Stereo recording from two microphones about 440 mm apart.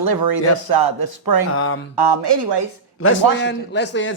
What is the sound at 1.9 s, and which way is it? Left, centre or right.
Speech, right.